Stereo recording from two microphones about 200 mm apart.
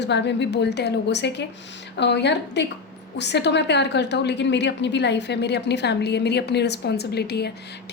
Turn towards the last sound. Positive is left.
turn(degrees=55)  # may be behind; listen again after turning